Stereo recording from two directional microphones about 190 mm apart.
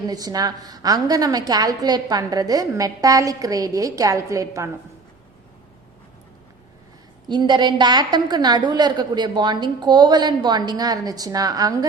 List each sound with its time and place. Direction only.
0.1 s a woman's voice: 20° right (ahead or behind)
7.3 s a woman's voice: 25° right (ahead or behind)